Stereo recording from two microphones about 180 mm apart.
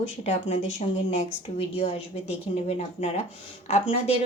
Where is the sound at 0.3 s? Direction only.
35° left (ahead or behind).